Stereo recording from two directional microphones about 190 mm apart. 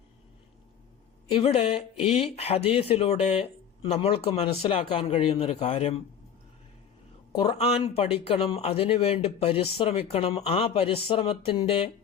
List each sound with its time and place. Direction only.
1.3 s speech: 30° left (ahead or behind)
7.3 s speech: 30° left (ahead or behind)